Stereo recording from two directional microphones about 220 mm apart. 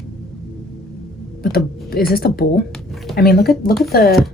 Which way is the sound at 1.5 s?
45° left (ahead or behind).